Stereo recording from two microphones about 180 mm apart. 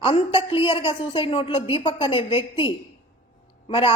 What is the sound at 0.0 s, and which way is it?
A woman's voice, 30° left (ahead or behind).